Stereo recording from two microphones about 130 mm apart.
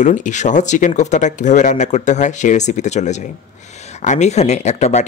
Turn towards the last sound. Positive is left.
turn(degrees=60)  # may be behind; listen again after turning